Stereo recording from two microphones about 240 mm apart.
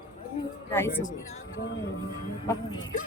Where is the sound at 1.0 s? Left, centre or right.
Left.